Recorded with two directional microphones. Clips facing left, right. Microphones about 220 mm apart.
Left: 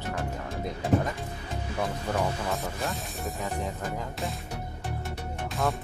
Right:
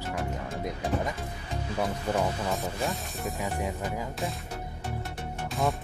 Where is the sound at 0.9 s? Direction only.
45° left (ahead or behind).